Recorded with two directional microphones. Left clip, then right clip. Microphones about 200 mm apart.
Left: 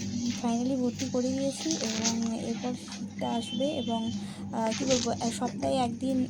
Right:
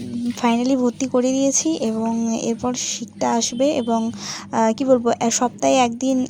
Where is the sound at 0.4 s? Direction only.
40° right (ahead or behind).